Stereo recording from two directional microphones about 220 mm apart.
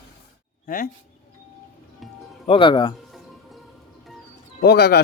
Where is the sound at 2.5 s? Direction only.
25° left (ahead or behind).